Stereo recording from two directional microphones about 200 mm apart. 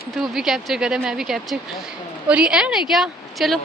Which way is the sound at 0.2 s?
Centre (ahead or behind).